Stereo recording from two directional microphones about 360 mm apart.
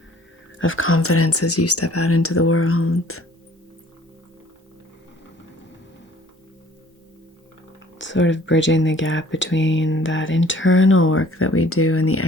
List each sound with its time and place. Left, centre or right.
0.6 s speech: left
7.9 s speech: left